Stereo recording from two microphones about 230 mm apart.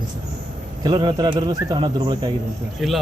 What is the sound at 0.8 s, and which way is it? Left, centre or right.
A man's voice, centre.